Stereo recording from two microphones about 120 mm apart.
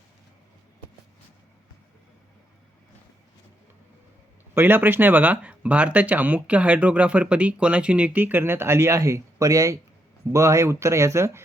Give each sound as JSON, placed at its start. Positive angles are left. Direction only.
{"t": 4.5, "sound": "speech", "side_deg": -15}